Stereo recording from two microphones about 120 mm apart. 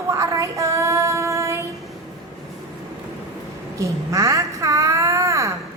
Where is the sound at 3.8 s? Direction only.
25° right (ahead or behind).